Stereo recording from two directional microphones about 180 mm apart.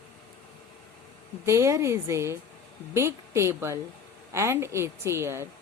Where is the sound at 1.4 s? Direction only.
15° right (ahead or behind).